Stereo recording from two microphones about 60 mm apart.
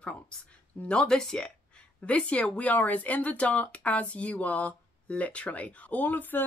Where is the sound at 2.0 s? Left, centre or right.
Left.